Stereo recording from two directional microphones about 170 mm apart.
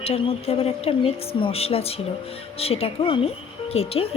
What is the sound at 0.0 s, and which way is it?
A woman's voice, 35° left (ahead or behind).